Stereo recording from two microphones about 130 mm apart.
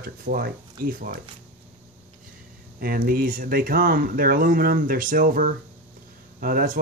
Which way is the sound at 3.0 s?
90° right.